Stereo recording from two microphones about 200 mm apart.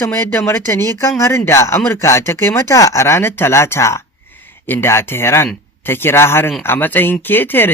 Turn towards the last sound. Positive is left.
turn(degrees=10)  # may be behind; listen again after turning